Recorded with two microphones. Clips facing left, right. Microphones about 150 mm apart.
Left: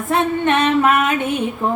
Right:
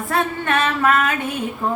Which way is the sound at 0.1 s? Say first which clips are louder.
Left 4 dB; 20° left (ahead or behind).